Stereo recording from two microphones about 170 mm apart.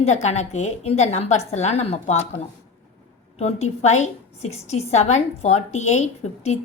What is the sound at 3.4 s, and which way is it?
A woman's voice, 40° left (ahead or behind).